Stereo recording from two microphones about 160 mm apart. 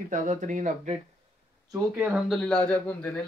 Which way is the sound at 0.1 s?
50° right (ahead or behind).